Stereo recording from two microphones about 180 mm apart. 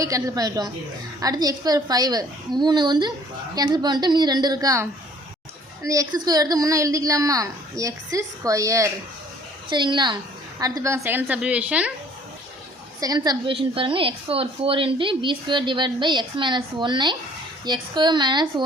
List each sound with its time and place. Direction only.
0.0 s a woman's voice: 20° right (ahead or behind)
10.6 s a woman's voice: 15° right (ahead or behind)
13.0 s a woman's voice: 20° right (ahead or behind)